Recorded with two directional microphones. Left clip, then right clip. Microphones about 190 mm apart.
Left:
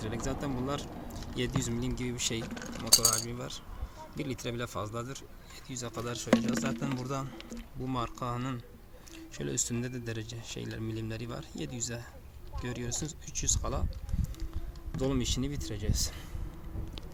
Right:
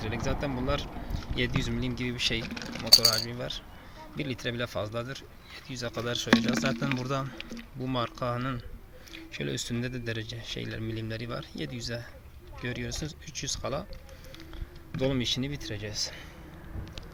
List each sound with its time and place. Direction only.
0.0 s speech: centre (ahead or behind)
2.9 s speech: 20° right (ahead or behind)
3.2 s speech: centre (ahead or behind)
14.9 s speech: centre (ahead or behind)